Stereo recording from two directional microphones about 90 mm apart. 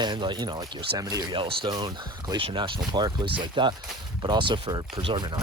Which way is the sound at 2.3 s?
80° right.